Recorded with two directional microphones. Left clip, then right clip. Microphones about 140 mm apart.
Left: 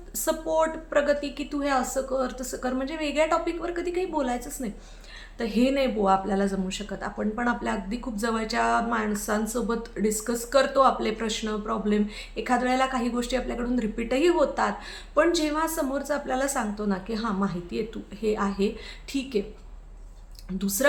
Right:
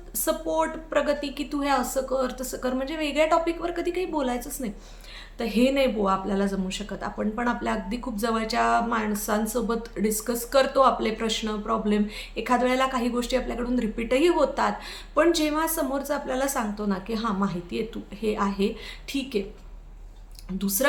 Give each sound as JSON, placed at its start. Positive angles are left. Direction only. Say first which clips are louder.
{"t": 0.3, "sound": "a woman's voice", "louder": "left 1 dB", "side_deg": -5}
{"t": 20.6, "sound": "a woman's voice", "louder": "right 1 dB", "side_deg": -5}